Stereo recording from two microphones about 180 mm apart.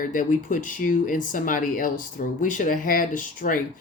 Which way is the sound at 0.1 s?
45° left (ahead or behind).